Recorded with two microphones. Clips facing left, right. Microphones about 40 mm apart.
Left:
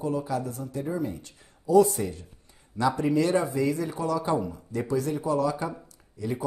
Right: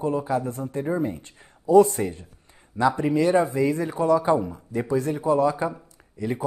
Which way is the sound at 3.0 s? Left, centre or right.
Centre.